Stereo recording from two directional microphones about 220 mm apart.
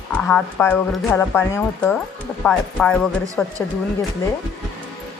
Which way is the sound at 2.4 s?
5° left (ahead or behind).